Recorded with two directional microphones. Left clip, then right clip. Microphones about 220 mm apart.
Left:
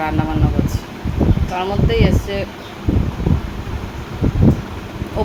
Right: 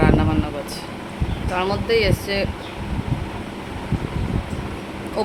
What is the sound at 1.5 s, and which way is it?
Speech, 10° right (ahead or behind).